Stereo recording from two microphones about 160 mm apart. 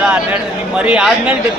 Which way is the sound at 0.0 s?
5° right (ahead or behind).